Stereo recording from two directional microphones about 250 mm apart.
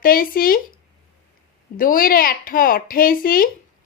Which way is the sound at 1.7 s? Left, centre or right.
Left.